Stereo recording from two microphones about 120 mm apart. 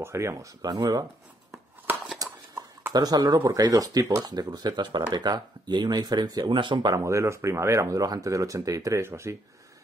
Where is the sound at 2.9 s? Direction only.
30° right (ahead or behind).